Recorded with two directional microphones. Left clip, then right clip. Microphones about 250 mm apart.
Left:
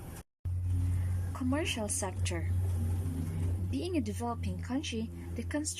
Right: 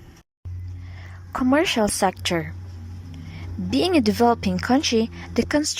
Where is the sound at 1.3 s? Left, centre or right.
Right.